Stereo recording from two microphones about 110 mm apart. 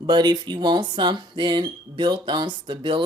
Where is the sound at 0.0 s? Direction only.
40° right (ahead or behind).